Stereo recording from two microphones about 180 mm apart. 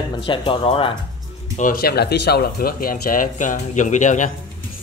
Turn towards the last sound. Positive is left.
turn(degrees=45)  # may be behind; listen again after turning